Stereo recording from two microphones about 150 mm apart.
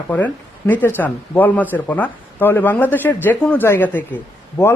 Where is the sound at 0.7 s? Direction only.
10° left (ahead or behind).